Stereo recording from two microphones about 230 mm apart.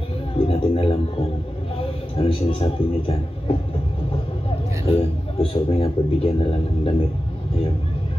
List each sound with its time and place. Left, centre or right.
0.5 s a man's voice: left
2.1 s a man's voice: left
4.8 s a man's voice: left